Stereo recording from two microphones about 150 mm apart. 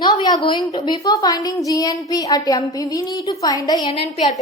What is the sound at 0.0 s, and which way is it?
A woman's voice, 30° left (ahead or behind).